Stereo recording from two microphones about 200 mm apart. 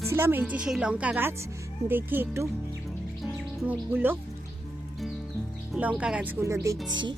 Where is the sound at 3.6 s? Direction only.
10° right (ahead or behind).